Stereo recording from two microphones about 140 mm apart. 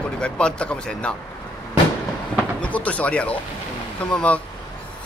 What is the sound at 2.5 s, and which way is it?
A man's voice, 10° left (ahead or behind).